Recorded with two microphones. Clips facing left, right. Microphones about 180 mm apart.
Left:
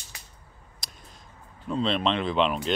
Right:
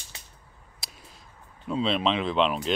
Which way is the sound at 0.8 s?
5° right (ahead or behind).